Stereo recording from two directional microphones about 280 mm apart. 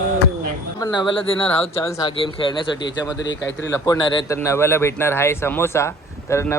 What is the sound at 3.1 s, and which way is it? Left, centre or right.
Speech, left.